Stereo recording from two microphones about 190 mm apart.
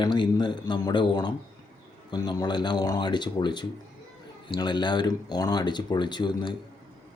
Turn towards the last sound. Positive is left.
turn(degrees=25)  # may be behind; listen again after turning